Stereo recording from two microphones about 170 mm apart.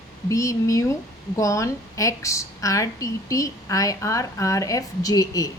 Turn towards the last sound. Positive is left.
turn(degrees=20)  # may be behind; listen again after turning